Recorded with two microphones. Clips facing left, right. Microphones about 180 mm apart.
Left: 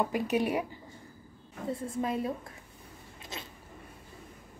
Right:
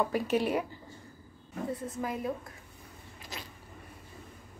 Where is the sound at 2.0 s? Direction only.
25° left (ahead or behind).